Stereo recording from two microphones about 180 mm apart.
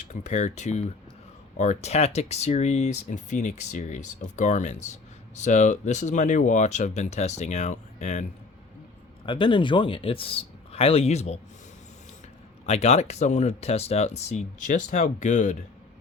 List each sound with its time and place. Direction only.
0.1 s speech: 40° left (ahead or behind)
9.2 s speech: 25° left (ahead or behind)
12.6 s speech: 35° left (ahead or behind)